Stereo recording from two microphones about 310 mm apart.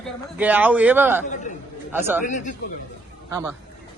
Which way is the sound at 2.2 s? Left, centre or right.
Left.